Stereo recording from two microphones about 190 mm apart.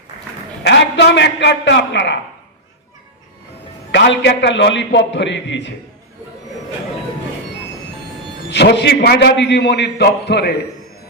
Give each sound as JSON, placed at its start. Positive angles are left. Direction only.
{"t": 0.6, "sound": "a man's voice", "side_deg": 65}
{"t": 3.9, "sound": "a man's voice", "side_deg": 65}
{"t": 8.4, "sound": "a man's voice", "side_deg": 65}